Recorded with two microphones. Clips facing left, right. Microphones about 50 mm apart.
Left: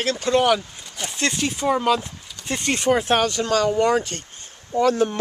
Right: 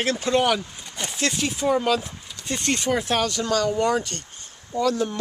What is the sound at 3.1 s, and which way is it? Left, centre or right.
Speech, left.